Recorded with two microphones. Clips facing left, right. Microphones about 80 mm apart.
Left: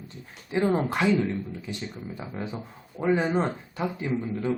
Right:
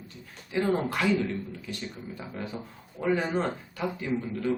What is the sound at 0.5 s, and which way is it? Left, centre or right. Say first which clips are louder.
Speech: left 2 dB; left.